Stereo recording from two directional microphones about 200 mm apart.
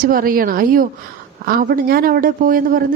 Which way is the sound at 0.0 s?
45° right (ahead or behind).